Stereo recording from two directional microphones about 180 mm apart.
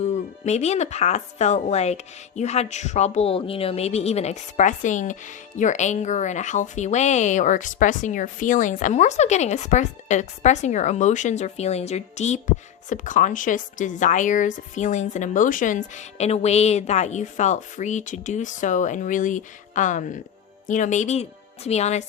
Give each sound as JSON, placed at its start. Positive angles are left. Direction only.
{"t": 0.0, "sound": "speech", "side_deg": 40}